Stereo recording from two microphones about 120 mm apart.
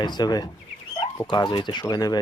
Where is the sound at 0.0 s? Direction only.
35° left (ahead or behind).